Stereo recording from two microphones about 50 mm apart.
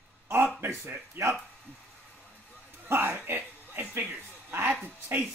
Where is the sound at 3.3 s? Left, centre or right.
Right.